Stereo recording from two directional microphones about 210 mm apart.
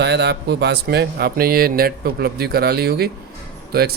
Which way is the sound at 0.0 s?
55° right (ahead or behind).